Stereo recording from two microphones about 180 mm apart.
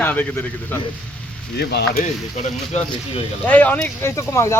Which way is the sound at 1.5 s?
65° left (ahead or behind).